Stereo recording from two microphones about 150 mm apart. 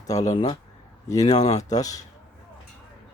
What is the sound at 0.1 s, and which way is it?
Speech, 25° left (ahead or behind).